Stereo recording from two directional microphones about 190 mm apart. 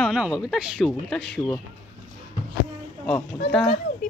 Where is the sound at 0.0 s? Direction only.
5° right (ahead or behind).